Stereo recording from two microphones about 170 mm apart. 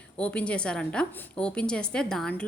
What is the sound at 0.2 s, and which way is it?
A woman's voice, 5° left (ahead or behind).